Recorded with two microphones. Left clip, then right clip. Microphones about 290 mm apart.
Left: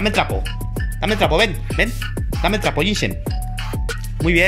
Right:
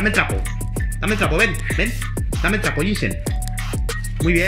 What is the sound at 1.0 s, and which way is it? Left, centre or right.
Speech, centre.